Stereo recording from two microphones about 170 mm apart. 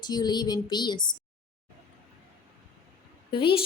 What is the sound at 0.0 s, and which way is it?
Speech, 25° left (ahead or behind).